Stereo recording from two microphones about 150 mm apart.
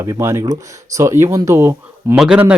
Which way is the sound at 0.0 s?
20° right (ahead or behind).